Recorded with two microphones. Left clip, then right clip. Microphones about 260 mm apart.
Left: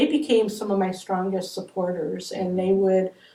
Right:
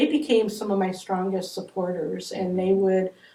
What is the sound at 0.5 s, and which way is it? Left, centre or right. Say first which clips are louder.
Speech: left 1 dB; right.